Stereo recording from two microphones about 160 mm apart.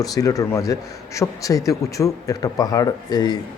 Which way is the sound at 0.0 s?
20° left (ahead or behind).